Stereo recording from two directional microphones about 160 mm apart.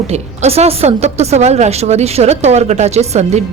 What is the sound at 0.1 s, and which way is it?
A woman's voice, 40° right (ahead or behind).